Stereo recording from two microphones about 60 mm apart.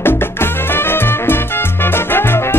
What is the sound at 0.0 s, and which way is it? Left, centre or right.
Music, left.